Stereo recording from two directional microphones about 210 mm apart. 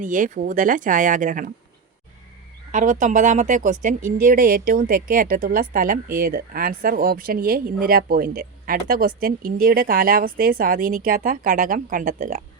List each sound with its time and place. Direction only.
0.0 s speech: 40° right (ahead or behind)
2.7 s speech: 35° right (ahead or behind)